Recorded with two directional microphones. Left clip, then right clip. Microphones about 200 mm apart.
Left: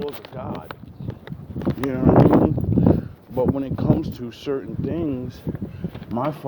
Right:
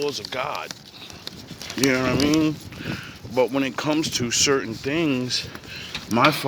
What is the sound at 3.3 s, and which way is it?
Speech, 15° right (ahead or behind).